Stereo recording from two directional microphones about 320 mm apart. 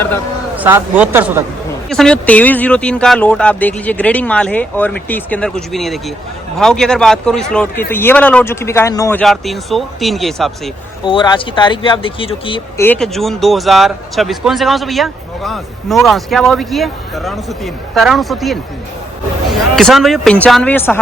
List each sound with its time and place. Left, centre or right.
0.5 s speech: centre
11.0 s speech: centre
19.7 s speech: centre